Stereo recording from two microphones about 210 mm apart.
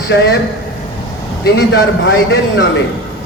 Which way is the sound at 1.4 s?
55° left (ahead or behind).